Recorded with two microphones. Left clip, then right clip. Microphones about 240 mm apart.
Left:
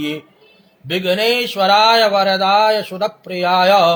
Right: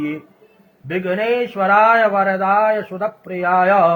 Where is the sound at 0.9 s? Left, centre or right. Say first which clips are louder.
Left 3 dB; left.